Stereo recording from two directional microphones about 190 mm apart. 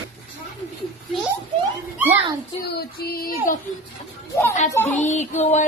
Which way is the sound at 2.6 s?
55° left (ahead or behind).